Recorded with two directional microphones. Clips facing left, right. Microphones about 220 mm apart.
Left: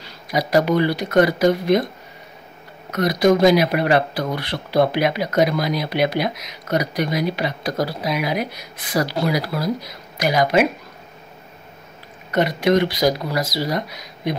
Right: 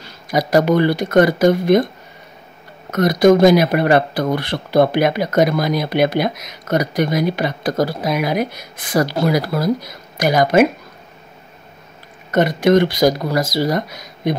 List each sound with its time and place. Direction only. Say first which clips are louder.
0.3 s speech: right 3 dB; 45° right (ahead or behind)
2.9 s speech: right 4 dB; 50° right (ahead or behind)
12.3 s speech: right 4 dB; 50° right (ahead or behind)